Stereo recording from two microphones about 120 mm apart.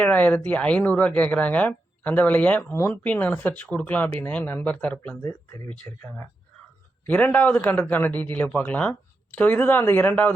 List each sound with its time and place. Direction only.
0.0 s a man's voice: 15° left (ahead or behind)